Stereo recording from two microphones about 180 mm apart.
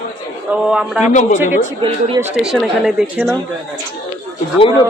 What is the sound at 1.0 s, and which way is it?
Speech, 40° left (ahead or behind).